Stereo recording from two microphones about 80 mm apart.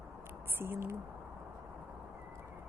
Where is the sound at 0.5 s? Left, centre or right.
Right.